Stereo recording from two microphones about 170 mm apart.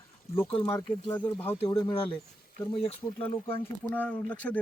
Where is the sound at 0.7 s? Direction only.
20° left (ahead or behind).